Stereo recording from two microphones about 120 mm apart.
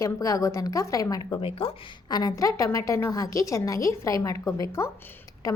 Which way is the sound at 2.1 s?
30° left (ahead or behind).